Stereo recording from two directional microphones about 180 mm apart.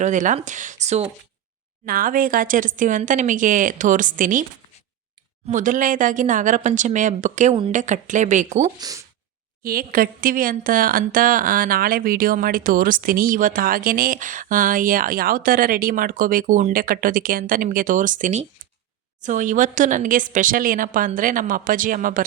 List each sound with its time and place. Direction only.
0.0 s speech: 45° right (ahead or behind)
1.8 s a woman's voice: 50° right (ahead or behind)
5.5 s a woman's voice: 45° right (ahead or behind)
8.8 s speech: 20° right (ahead or behind)
9.6 s a woman's voice: 55° right (ahead or behind)